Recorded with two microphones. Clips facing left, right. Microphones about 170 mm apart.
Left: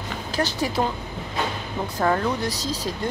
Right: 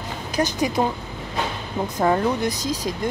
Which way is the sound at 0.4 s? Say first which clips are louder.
Right 3 dB; 15° right (ahead or behind).